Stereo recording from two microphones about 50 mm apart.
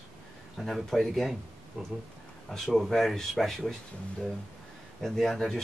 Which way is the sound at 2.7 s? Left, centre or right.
Centre.